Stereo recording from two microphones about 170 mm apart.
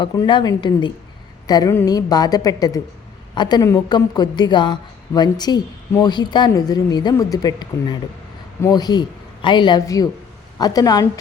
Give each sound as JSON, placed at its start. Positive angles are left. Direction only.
{"t": 0.0, "sound": "a woman's voice", "side_deg": 25}